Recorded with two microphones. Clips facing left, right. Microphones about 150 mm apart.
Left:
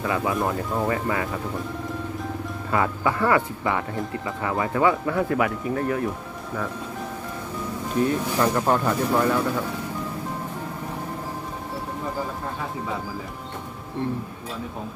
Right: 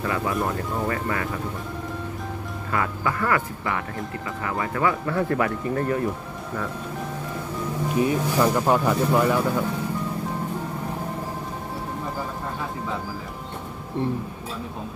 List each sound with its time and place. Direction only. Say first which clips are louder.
0.1 s speech: left 2 dB; 15° left (ahead or behind)
2.7 s speech: left 3 dB; 20° left (ahead or behind)
5.0 s speech: left 1 dB; 5° left (ahead or behind)
8.0 s speech: right 1 dB; 10° right (ahead or behind)